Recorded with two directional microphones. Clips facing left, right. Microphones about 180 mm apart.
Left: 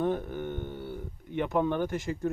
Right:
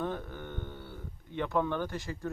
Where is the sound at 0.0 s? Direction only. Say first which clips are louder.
Left 6 dB; 15° left (ahead or behind).